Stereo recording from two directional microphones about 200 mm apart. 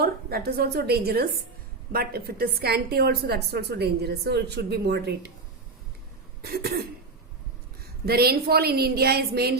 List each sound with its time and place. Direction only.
0.0 s a woman's voice: 50° right (ahead or behind)
6.4 s a woman's voice: 50° right (ahead or behind)
8.0 s a woman's voice: 50° right (ahead or behind)